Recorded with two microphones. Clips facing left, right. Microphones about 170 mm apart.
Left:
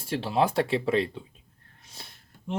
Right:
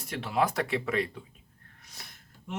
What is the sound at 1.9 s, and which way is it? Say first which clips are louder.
Gasp: left 3 dB; 30° left (ahead or behind).